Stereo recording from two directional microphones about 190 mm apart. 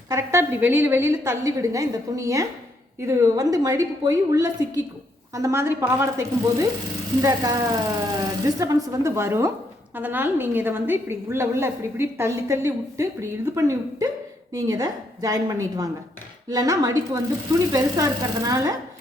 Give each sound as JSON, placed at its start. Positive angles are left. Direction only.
{"t": 0.1, "sound": "a woman's voice", "side_deg": -15}